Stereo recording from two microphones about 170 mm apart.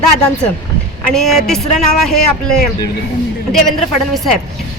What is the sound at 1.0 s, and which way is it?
Speech, centre (ahead or behind).